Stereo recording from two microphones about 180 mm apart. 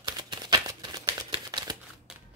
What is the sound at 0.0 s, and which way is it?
Crumpling, 25° right (ahead or behind).